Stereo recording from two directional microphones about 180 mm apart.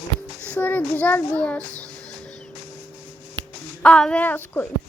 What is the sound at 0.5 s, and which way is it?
A child's voice, 10° left (ahead or behind).